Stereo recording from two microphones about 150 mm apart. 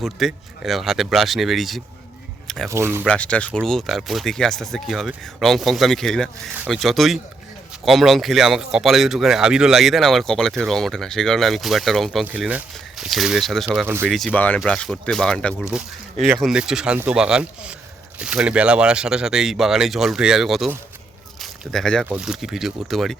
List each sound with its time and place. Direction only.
0.0 s speech: centre (ahead or behind)
2.6 s speech: 15° right (ahead or behind)
3.1 s speech: 10° left (ahead or behind)
12.2 s speech: 10° right (ahead or behind)
13.8 s speech: 15° right (ahead or behind)
14.1 s speech: centre (ahead or behind)
14.3 s speech: 10° left (ahead or behind)
22.0 s speech: 5° right (ahead or behind)